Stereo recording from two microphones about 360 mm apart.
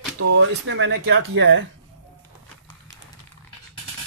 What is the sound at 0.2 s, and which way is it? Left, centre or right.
Speech, right.